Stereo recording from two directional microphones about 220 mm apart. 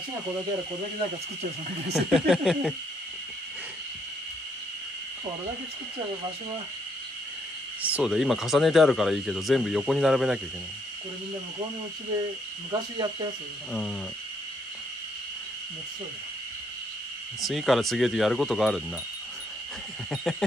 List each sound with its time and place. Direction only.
2.0 s speech: centre (ahead or behind)
7.8 s speech: 5° right (ahead or behind)
12.9 s speech: 20° right (ahead or behind)
17.4 s speech: centre (ahead or behind)
20.1 s speech: centre (ahead or behind)